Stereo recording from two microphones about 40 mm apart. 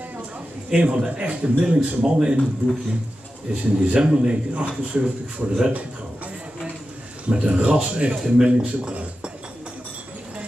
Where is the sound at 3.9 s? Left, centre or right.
Right.